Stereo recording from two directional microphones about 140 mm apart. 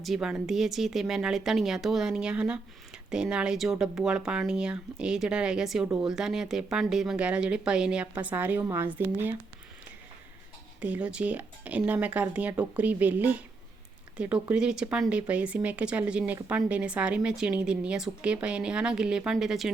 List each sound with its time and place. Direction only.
0.0 s speech: 5° right (ahead or behind)
10.8 s speech: 10° right (ahead or behind)